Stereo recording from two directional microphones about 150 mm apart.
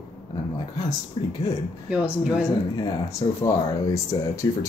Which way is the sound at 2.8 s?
20° left (ahead or behind).